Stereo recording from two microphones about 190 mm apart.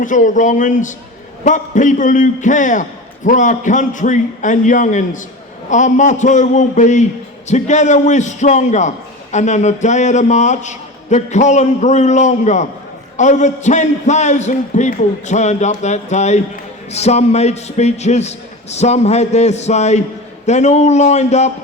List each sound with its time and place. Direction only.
0.0 s a man's voice: 45° left (ahead or behind)